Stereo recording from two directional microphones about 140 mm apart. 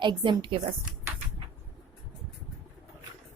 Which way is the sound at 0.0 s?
35° right (ahead or behind).